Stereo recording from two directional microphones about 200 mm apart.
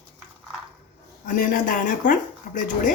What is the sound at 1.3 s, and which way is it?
Speech, 45° left (ahead or behind).